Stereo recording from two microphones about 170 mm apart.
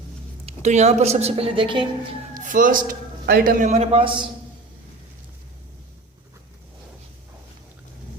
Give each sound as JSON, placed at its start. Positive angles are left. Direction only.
{"t": 0.4, "sound": "a woman's voice", "side_deg": -40}
{"t": 2.3, "sound": "a man's voice", "side_deg": -50}